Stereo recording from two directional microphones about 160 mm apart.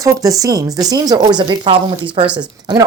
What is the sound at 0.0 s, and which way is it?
Speech, 20° right (ahead or behind).